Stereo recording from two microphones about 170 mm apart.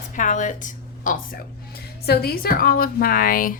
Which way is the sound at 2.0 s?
70° left (ahead or behind).